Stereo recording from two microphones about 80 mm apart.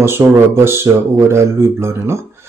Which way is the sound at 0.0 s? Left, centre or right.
Right.